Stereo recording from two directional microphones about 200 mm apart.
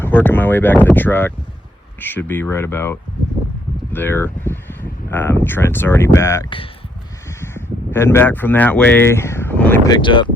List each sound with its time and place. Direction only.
0.0 s speech: 10° left (ahead or behind)
9.9 s speech: 25° left (ahead or behind)